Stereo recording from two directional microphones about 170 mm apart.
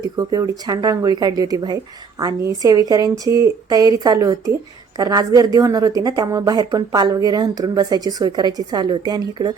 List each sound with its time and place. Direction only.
0.2 s a woman's voice: 25° right (ahead or behind)